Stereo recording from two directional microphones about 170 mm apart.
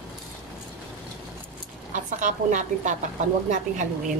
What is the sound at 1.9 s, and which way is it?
A woman's voice, 50° right (ahead or behind).